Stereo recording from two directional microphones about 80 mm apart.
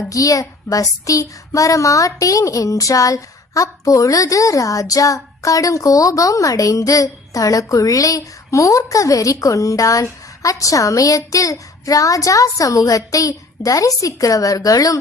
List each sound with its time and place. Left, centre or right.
0.1 s a child's voice: left